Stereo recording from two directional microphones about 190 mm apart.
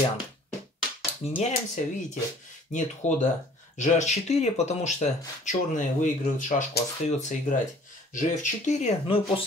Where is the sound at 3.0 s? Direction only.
35° left (ahead or behind).